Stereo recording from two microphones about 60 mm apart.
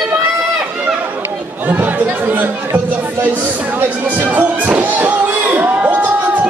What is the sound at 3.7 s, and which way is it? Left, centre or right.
Speech, right.